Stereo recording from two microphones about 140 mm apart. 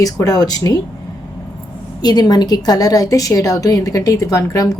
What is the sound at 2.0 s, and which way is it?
A woman's voice, 30° left (ahead or behind).